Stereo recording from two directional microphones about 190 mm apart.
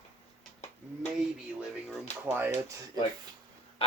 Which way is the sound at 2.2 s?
10° right (ahead or behind).